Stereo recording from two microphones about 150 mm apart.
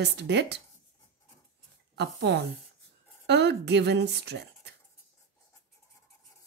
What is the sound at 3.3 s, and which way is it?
Speech, 90° right.